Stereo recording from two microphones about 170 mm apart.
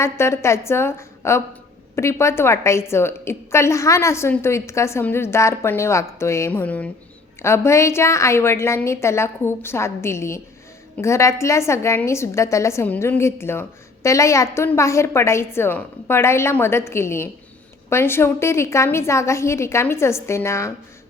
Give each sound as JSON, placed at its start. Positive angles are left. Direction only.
{"t": 0.0, "sound": "a woman's voice", "side_deg": 15}